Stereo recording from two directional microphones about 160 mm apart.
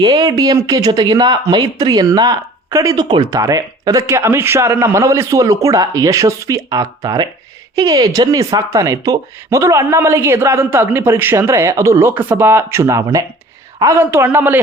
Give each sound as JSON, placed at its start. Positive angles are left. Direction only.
{"t": 0.0, "sound": "speech", "side_deg": -25}